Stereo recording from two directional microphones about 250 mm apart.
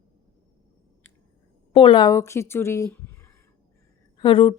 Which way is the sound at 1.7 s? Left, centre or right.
Left.